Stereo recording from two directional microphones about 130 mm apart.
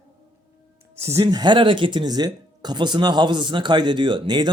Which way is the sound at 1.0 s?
20° right (ahead or behind).